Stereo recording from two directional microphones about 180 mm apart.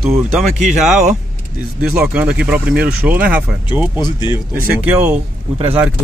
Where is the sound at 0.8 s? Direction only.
5° right (ahead or behind).